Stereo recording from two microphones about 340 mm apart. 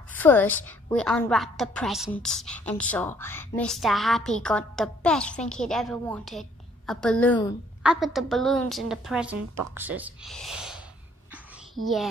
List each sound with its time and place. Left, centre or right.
0.1 s a woman's voice: centre
11.8 s a child's voice: right